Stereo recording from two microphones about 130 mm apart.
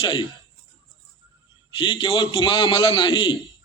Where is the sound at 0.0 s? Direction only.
35° left (ahead or behind).